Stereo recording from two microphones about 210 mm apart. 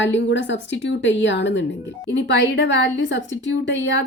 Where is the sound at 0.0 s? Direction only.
60° left (ahead or behind).